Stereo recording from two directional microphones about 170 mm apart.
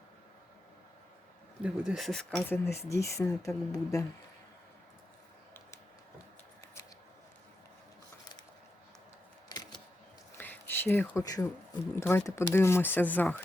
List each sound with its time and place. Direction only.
1.6 s speech: 5° right (ahead or behind)
2.3 s speech: 15° left (ahead or behind)
10.3 s a sound: 10° left (ahead or behind)
11.2 s speech: 20° left (ahead or behind)